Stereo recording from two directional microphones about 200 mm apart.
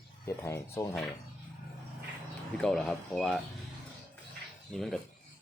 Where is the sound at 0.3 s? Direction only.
15° left (ahead or behind).